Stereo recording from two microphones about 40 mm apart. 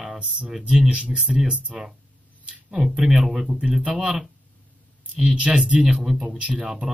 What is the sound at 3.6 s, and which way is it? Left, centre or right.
Speech, right.